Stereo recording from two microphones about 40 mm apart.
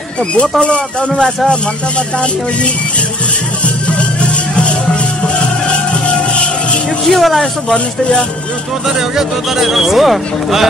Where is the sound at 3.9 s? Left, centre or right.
Left.